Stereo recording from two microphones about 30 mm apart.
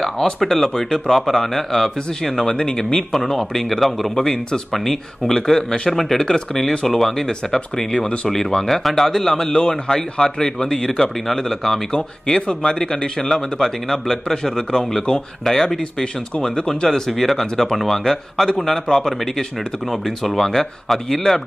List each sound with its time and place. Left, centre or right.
0.0 s a man's voice: centre
0.8 s speech: left
1.3 s a man's voice: centre
2.5 s speech: left
3.1 s a man's voice: centre
4.1 s a man's voice: left
6.1 s speech: left
6.9 s a man's voice: centre
9.5 s speech: left
13.3 s a man's voice: centre
16.0 s speech: left
17.1 s a man's voice: centre